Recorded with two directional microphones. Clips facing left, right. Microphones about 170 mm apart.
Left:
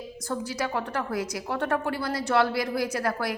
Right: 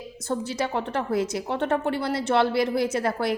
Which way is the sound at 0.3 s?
25° right (ahead or behind).